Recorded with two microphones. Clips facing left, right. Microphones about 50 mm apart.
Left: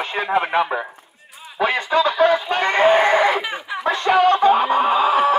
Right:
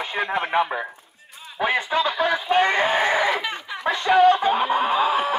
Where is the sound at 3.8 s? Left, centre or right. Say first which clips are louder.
Left 1 dB; left.